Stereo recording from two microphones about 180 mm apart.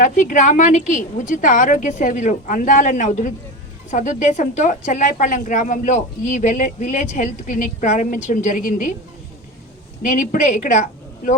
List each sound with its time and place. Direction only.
0.0 s a woman's voice: 45° left (ahead or behind)
10.0 s speech: 45° left (ahead or behind)